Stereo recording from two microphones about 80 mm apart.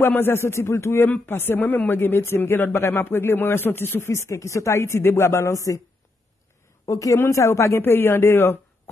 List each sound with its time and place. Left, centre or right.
0.0 s speech: left
6.9 s a woman's voice: left